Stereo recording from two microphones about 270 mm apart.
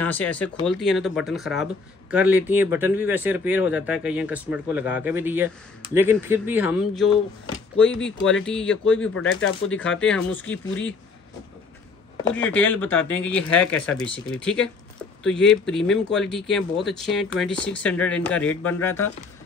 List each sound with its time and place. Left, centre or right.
0.0 s speech: centre
9.1 s speech: left
9.7 s speech: centre
12.4 s speech: centre